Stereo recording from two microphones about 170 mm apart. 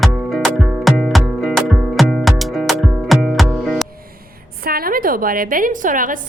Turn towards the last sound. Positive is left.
turn(degrees=-50)  # may be behind; listen again after turning